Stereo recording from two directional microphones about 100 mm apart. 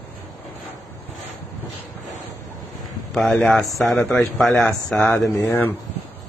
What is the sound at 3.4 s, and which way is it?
Speech, 5° left (ahead or behind).